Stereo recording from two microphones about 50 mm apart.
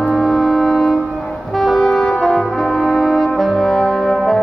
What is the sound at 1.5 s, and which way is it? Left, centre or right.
Brass instrument, centre.